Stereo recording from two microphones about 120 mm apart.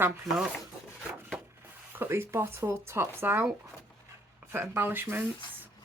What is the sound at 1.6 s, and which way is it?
Speech, 20° right (ahead or behind).